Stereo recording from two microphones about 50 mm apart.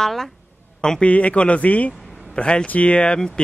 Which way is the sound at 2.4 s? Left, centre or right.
Centre.